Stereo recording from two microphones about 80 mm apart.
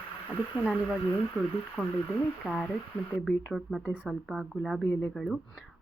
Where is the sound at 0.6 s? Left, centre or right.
Centre.